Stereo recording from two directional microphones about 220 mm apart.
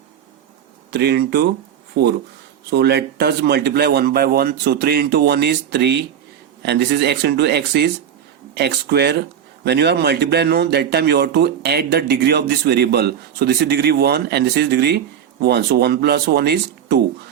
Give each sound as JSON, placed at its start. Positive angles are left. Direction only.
{"t": 0.9, "sound": "speech", "side_deg": -50}